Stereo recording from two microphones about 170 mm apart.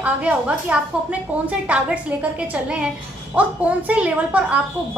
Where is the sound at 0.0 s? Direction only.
5° right (ahead or behind).